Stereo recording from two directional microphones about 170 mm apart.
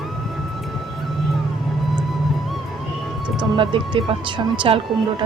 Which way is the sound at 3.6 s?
30° right (ahead or behind).